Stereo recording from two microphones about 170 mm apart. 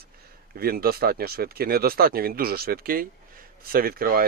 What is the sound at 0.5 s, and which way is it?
Speech, 60° right (ahead or behind).